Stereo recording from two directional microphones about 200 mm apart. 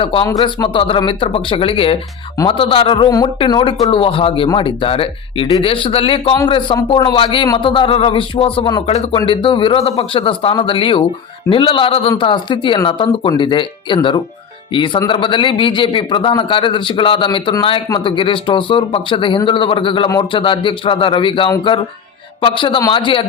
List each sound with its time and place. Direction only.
0.0 s a man's voice: 25° left (ahead or behind)